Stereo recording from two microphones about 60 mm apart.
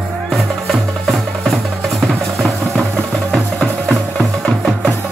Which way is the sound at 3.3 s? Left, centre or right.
Centre.